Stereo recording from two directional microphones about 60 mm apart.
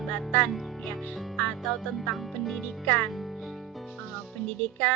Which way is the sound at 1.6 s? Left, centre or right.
Centre.